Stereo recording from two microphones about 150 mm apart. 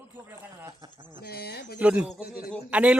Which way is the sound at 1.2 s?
90° left.